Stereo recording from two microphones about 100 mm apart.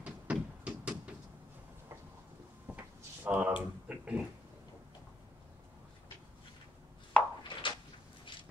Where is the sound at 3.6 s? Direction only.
15° right (ahead or behind).